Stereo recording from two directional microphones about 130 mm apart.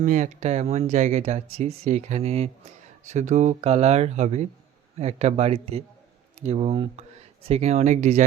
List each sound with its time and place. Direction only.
0.0 s speech: 75° right (ahead or behind); by 2.5 s 55° right (ahead or behind)
3.0 s speech: 65° right (ahead or behind)